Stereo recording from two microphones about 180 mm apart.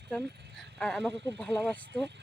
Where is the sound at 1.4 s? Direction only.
10° left (ahead or behind).